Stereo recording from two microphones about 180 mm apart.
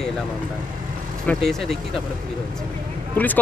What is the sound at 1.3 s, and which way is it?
Speech, centre (ahead or behind).